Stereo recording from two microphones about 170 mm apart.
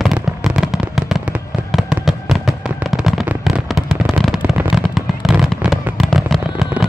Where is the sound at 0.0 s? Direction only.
Centre (ahead or behind).